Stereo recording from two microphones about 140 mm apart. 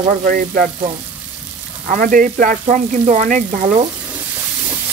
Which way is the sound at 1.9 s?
75° right (ahead or behind).